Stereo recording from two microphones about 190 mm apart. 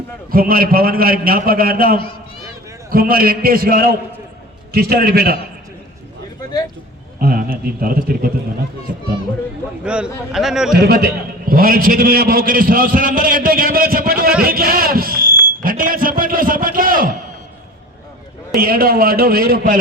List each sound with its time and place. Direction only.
0.3 s a man's voice: 50° right (ahead or behind)
7.2 s a man's voice: 50° right (ahead or behind)
9.8 s a man's voice: 5° right (ahead or behind)
10.8 s a man's voice: 55° right (ahead or behind)
18.5 s a man's voice: 50° right (ahead or behind)